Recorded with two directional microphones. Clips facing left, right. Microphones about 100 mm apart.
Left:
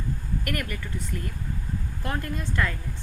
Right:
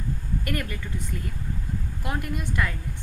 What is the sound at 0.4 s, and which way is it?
Speech, 25° right (ahead or behind).